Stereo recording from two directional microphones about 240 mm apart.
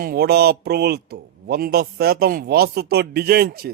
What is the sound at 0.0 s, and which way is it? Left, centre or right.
Speech, right.